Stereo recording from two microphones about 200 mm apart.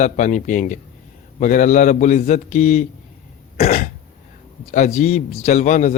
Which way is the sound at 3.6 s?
40° left (ahead or behind).